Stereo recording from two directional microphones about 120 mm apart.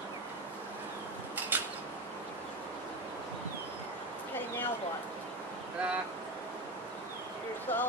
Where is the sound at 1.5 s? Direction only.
15° right (ahead or behind).